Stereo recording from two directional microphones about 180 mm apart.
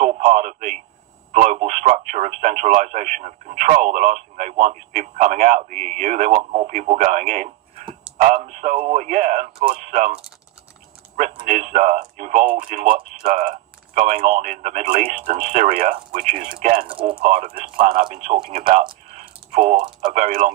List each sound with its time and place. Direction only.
0.0 s speech: 40° right (ahead or behind)
11.2 s speech: 40° right (ahead or behind)
16.8 s speech: 30° right (ahead or behind)
17.5 s speech: 50° right (ahead or behind)
19.2 s typing: 35° right (ahead or behind)
20.1 s speech: 45° right (ahead or behind)